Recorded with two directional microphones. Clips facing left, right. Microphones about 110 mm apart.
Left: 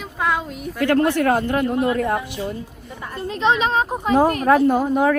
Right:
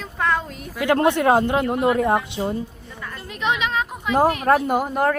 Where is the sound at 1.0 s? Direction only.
20° right (ahead or behind).